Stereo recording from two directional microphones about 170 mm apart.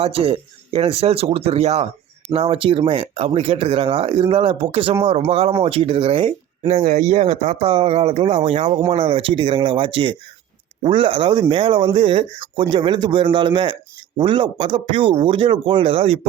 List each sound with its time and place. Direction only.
0.0 s speech: 35° right (ahead or behind)